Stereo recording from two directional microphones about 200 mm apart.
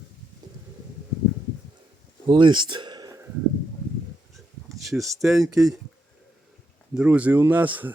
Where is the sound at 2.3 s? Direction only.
25° right (ahead or behind).